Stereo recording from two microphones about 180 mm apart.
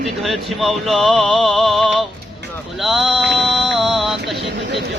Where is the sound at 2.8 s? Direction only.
Centre (ahead or behind).